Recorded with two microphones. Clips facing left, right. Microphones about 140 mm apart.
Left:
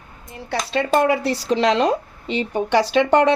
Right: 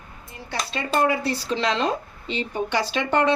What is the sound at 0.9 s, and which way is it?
A woman's voice, 70° left (ahead or behind).